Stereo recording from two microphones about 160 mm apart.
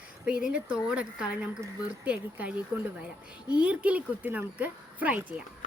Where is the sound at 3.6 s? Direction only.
10° right (ahead or behind).